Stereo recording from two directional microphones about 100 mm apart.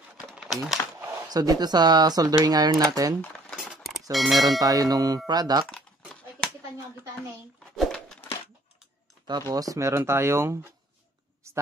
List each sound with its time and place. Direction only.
0.4 s typewriter: centre (ahead or behind)
1.3 s speech: 40° right (ahead or behind)
3.2 s cutlery: 10° left (ahead or behind)
3.5 s keys jangling: 5° right (ahead or behind)
4.1 s speech: centre (ahead or behind)
4.6 s speech: 35° right (ahead or behind)
7.7 s a sound: 5° left (ahead or behind)
9.5 s speech: 35° right (ahead or behind)